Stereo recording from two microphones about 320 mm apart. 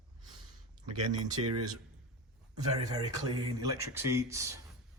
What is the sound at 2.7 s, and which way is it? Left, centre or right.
Speech, centre.